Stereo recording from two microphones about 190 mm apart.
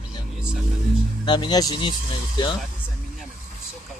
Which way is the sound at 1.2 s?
25° left (ahead or behind).